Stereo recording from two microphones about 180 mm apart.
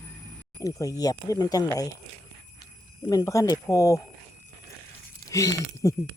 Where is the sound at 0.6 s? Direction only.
20° left (ahead or behind).